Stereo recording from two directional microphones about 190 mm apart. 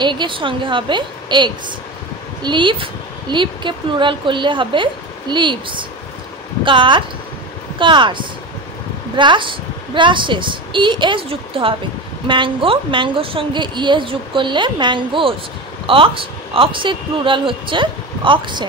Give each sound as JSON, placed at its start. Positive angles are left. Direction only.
{"t": 0.0, "sound": "a woman's voice", "side_deg": -25}